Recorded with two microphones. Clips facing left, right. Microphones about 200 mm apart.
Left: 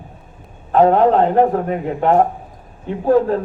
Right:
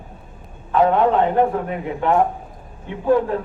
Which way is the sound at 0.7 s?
35° left (ahead or behind).